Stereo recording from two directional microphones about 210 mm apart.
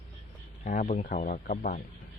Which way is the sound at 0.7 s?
40° left (ahead or behind).